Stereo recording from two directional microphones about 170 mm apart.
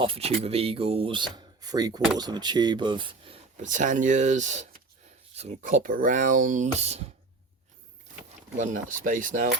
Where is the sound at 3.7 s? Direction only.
50° right (ahead or behind).